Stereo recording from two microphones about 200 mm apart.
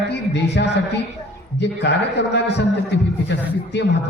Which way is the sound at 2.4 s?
60° left (ahead or behind).